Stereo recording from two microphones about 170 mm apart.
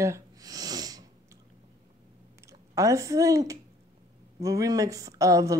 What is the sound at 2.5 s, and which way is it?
Speech, 20° right (ahead or behind).